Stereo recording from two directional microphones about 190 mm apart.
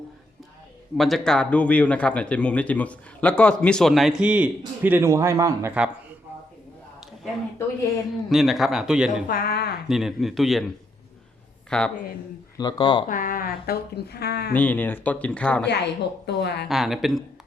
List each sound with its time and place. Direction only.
0.9 s speech: centre (ahead or behind)
8.3 s speech: centre (ahead or behind)
9.2 s speech: 50° left (ahead or behind)
9.9 s speech: centre (ahead or behind)
11.7 s speech: 5° left (ahead or behind)
12.5 s speech: 20° left (ahead or behind)
13.1 s speech: 45° left (ahead or behind)
14.5 s speech: 10° left (ahead or behind)
15.6 s speech: 60° left (ahead or behind)
16.6 s speech: centre (ahead or behind)